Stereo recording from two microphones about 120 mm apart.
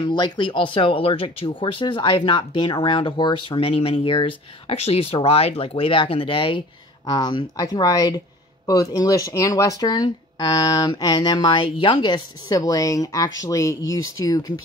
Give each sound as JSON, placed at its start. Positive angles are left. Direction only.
{"t": 0.0, "sound": "speech", "side_deg": 40}
{"t": 7.1, "sound": "speech", "side_deg": 35}
{"t": 11.5, "sound": "speech", "side_deg": 45}
{"t": 12.4, "sound": "speech", "side_deg": 25}